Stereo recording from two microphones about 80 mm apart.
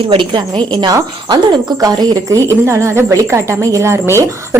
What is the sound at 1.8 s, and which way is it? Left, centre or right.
Speech, right.